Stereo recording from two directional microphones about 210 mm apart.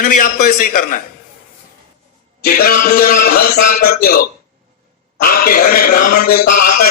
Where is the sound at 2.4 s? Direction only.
45° left (ahead or behind).